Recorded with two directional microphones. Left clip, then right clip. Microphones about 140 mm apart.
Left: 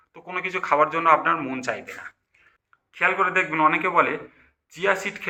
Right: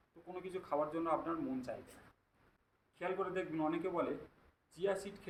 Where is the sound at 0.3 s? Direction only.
45° right (ahead or behind).